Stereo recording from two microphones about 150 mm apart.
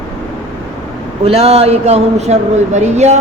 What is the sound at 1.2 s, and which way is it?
A man's voice, 45° right (ahead or behind).